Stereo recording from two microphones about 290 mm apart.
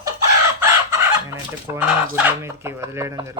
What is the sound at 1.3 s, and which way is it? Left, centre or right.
Speech, centre.